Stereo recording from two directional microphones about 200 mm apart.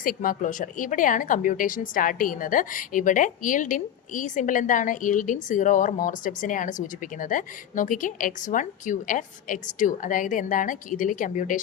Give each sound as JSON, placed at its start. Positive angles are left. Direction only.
{"t": 0.0, "sound": "a woman's voice", "side_deg": 45}